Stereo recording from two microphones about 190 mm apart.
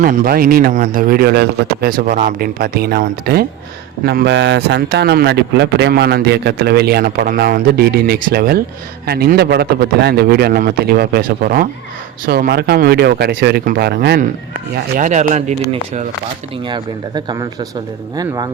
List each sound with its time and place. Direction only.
0.0 s a man's voice: 50° right (ahead or behind)
14.9 s speech: 40° right (ahead or behind)
16.6 s speech: 25° right (ahead or behind)